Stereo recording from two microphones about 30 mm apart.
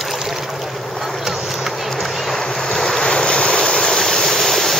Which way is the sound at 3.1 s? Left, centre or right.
Left.